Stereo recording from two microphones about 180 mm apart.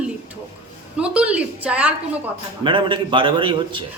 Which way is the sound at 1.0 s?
5° right (ahead or behind).